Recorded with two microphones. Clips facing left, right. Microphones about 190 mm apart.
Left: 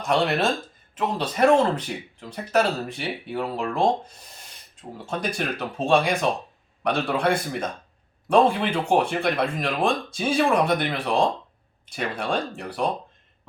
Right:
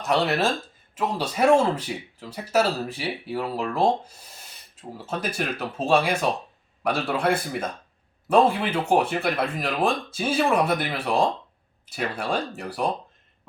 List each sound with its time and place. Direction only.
0.0 s speech: 5° right (ahead or behind)